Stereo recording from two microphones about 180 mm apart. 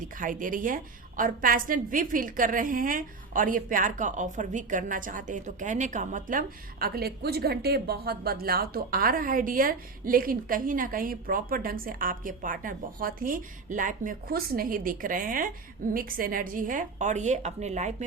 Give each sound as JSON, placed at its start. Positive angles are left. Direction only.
{"t": 0.2, "sound": "a woman's voice", "side_deg": -50}